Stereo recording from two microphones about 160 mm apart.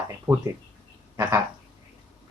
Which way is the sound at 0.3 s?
25° right (ahead or behind).